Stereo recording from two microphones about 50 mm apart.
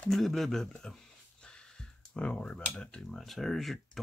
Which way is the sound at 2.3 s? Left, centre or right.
Left.